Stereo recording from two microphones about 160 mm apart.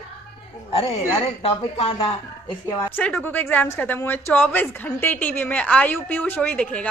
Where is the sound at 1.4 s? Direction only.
35° left (ahead or behind).